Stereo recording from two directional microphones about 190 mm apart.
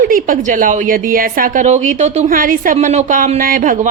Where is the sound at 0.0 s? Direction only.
45° right (ahead or behind).